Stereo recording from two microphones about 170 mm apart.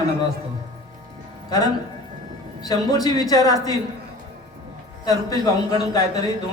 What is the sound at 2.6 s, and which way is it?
A man's voice, 25° left (ahead or behind).